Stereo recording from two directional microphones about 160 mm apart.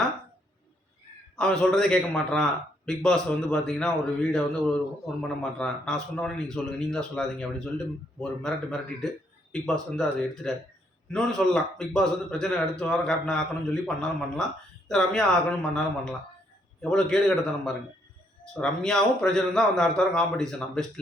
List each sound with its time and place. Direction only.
1.4 s a man's voice: 5° left (ahead or behind)